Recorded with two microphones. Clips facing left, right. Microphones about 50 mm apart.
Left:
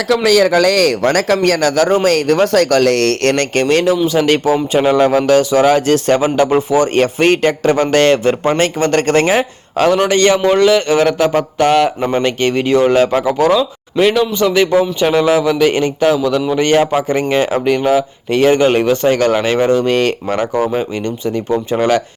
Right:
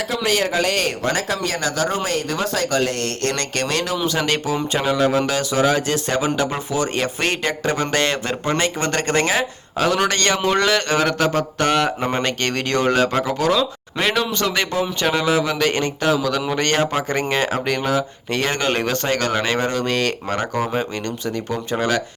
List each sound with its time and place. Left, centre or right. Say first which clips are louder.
0.1 s speech: left 11 dB; left
1.0 s speech: left 9 dB; left
2.0 s speech: left 11 dB; left
3.3 s a man's voice: left 9 dB; left
4.7 s a man's voice: left 6 dB; left
9.9 s a man's voice: left 8 dB; left
13.5 s a man's voice: left 5 dB; centre
21.3 s speech: left 9 dB; left